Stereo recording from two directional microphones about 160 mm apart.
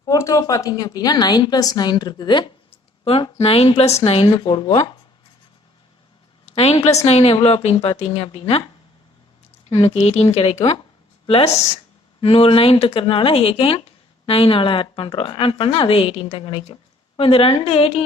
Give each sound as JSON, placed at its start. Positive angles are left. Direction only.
{"t": 0.0, "sound": "a woman's voice", "side_deg": 20}
{"t": 6.5, "sound": "a sound", "side_deg": 40}
{"t": 6.8, "sound": "speech", "side_deg": 40}
{"t": 9.6, "sound": "speech", "side_deg": 40}